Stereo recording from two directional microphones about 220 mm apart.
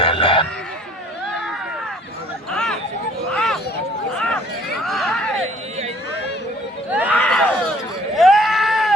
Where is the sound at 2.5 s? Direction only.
5° left (ahead or behind).